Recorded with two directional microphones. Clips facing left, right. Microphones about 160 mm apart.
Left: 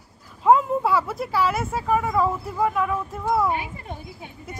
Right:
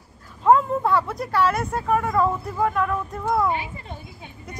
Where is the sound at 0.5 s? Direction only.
5° left (ahead or behind).